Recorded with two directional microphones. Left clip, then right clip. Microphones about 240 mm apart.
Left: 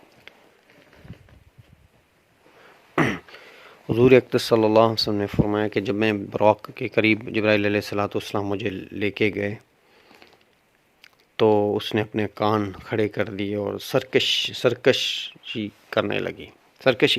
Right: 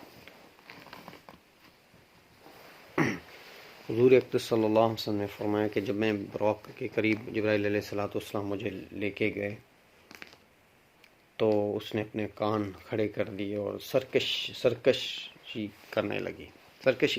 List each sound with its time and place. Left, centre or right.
0.3 s run: left
2.9 s throat clearing: left
3.9 s speech: left
11.0 s speech: left